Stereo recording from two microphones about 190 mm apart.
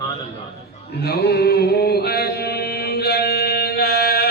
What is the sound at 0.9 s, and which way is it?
Chant, 55° left (ahead or behind).